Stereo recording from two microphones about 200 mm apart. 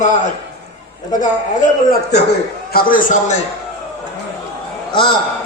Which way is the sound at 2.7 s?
45° left (ahead or behind).